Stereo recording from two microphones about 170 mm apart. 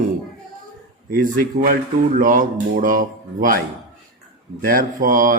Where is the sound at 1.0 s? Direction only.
55° right (ahead or behind).